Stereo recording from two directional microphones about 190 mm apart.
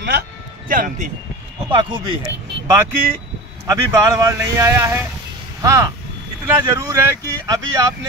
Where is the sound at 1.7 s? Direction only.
25° right (ahead or behind).